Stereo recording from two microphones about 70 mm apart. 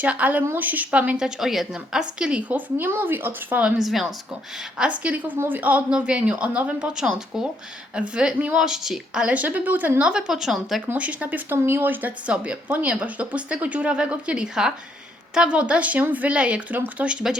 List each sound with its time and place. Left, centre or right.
0.0 s a woman's voice: right
1.4 s speech: centre; by 3.6 s right
3.6 s a woman's voice: centre
4.8 s a woman's voice: centre
9.2 s speech: right
10.0 s a woman's voice: centre
10.9 s speech: centre